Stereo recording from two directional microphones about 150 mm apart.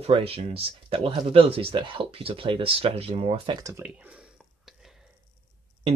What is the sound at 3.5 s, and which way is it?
Speech, 20° right (ahead or behind).